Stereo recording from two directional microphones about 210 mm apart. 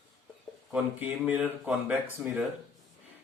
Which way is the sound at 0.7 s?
10° right (ahead or behind).